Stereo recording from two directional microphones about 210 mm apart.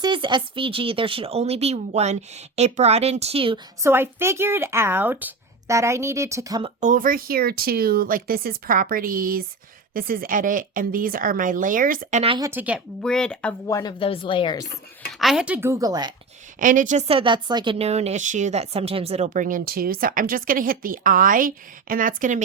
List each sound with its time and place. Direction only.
0.0 s speech: 20° right (ahead or behind)
3.8 s a woman's voice: 10° right (ahead or behind)
6.7 s a woman's voice: 35° right (ahead or behind)
12.2 s speech: 25° right (ahead or behind)
12.5 s a woman's voice: 10° right (ahead or behind)
13.0 s speech: 5° left (ahead or behind)
13.7 s speech: 20° left (ahead or behind)
15.2 s a woman's voice: 5° right (ahead or behind); by 16.1 s 20° right (ahead or behind)
16.6 s a woman's voice: 40° right (ahead or behind)